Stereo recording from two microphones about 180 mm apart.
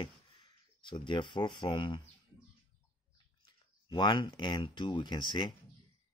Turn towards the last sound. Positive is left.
turn(degrees=25)  # may be behind; listen again after turning